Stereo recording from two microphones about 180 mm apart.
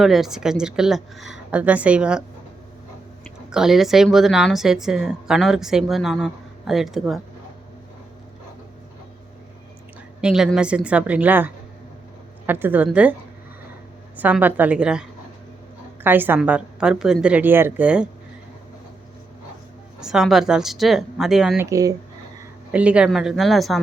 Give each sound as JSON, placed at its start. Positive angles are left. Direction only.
{"t": 0.0, "sound": "a woman's voice", "side_deg": 0}
{"t": 3.5, "sound": "a woman's voice", "side_deg": 0}
{"t": 10.2, "sound": "a woman's voice", "side_deg": -5}
{"t": 14.2, "sound": "a woman's voice", "side_deg": -10}
{"t": 16.0, "sound": "a woman's voice", "side_deg": -10}
{"t": 20.0, "sound": "a woman's voice", "side_deg": -5}
{"t": 21.7, "sound": "a woman's voice", "side_deg": -20}
{"t": 22.7, "sound": "a woman's voice", "side_deg": -5}